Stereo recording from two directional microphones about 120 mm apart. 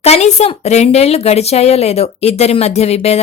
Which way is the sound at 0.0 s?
65° left (ahead or behind).